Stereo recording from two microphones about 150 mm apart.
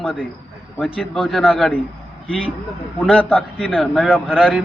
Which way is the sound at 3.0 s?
5° left (ahead or behind).